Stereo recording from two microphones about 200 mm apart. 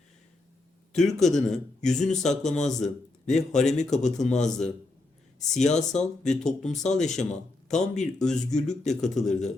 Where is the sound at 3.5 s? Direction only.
35° left (ahead or behind).